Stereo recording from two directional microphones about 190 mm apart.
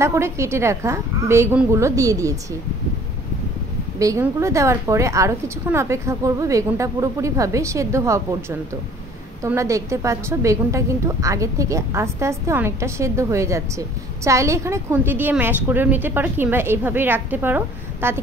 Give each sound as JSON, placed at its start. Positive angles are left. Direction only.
{"t": 0.0, "sound": "a woman's voice", "side_deg": -15}
{"t": 4.0, "sound": "a woman's voice", "side_deg": -15}